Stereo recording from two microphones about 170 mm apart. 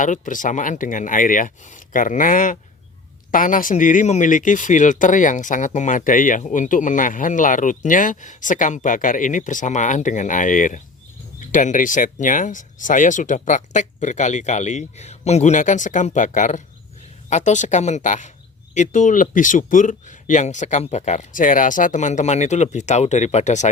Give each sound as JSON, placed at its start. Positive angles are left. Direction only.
{"t": 0.0, "sound": "speech", "side_deg": 50}